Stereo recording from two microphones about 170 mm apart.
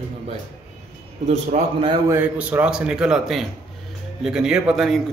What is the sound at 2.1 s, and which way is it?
A man's voice, 10° right (ahead or behind).